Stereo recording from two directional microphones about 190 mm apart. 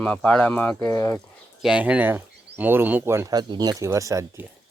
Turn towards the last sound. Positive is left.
turn(degrees=-15)  # may be behind; listen again after turning